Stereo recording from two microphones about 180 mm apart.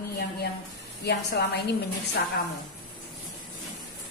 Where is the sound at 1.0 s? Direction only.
65° left (ahead or behind).